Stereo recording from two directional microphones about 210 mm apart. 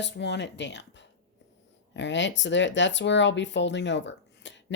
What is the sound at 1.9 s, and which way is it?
Speech, 60° left (ahead or behind).